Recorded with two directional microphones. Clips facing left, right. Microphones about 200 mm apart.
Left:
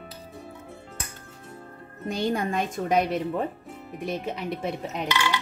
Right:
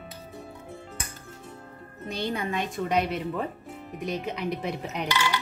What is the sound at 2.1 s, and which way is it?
Speech, 45° left (ahead or behind).